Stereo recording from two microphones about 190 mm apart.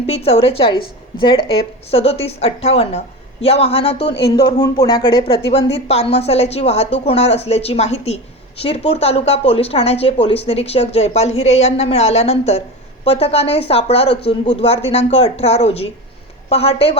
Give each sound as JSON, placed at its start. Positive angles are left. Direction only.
{"t": 0.1, "sound": "a woman's voice", "side_deg": 30}
{"t": 1.9, "sound": "a woman's voice", "side_deg": 30}
{"t": 4.0, "sound": "speech", "side_deg": 60}
{"t": 4.6, "sound": "a woman's voice", "side_deg": 20}